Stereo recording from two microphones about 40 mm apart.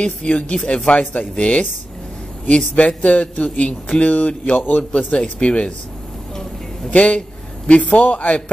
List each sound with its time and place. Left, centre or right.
0.0 s speech: left
6.9 s speech: left